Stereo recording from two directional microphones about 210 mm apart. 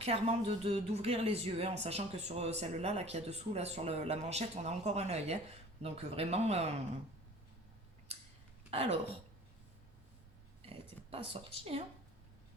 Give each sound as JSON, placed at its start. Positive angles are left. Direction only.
{"t": 0.0, "sound": "speech", "side_deg": -30}
{"t": 8.7, "sound": "speech", "side_deg": -30}
{"t": 10.6, "sound": "a sound", "side_deg": -25}